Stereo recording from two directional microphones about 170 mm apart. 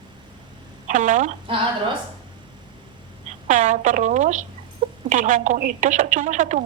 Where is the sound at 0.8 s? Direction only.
45° right (ahead or behind).